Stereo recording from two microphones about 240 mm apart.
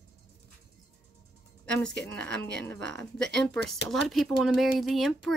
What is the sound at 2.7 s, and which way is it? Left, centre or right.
Speech, right.